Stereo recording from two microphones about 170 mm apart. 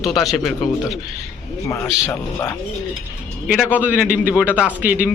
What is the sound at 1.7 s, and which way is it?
Speech, 15° left (ahead or behind).